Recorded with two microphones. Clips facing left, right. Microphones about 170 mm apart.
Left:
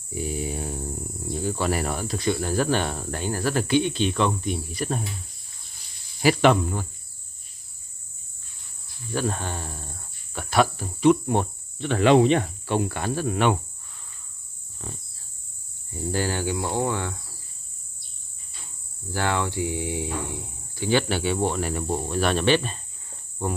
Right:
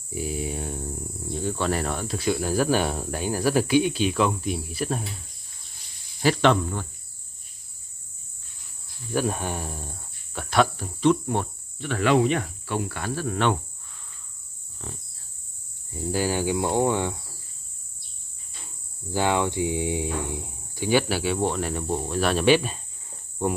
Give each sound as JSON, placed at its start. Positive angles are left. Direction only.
{"t": 0.1, "sound": "cricket", "side_deg": 0}
{"t": 2.1, "sound": "speech", "side_deg": -5}
{"t": 6.2, "sound": "speech", "side_deg": 10}
{"t": 9.1, "sound": "speech", "side_deg": -10}
{"t": 10.3, "sound": "speech", "side_deg": 5}
{"t": 16.0, "sound": "speech", "side_deg": -10}
{"t": 19.1, "sound": "speech", "side_deg": -15}